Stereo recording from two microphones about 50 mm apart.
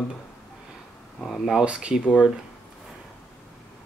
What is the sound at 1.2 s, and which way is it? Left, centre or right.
Speech, centre.